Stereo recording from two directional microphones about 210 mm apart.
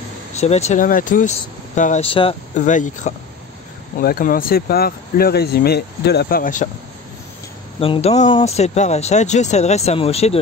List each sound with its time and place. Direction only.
0.3 s speech: 30° left (ahead or behind)
7.8 s speech: 30° left (ahead or behind)